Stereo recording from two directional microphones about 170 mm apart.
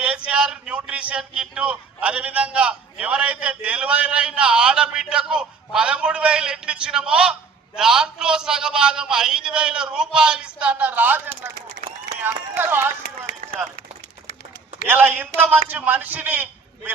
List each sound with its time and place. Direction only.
0.0 s a sound: 5° right (ahead or behind)
1.4 s a man's voice: 5° right (ahead or behind)
12.2 s a man's voice: 10° right (ahead or behind)
13.4 s run: 50° right (ahead or behind)
14.8 s a man's voice: 10° right (ahead or behind)